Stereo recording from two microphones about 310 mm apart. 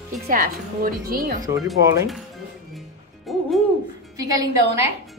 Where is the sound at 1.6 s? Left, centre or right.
Centre.